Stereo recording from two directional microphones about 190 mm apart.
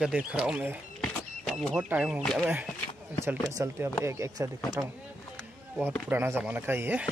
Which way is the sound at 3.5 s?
15° right (ahead or behind).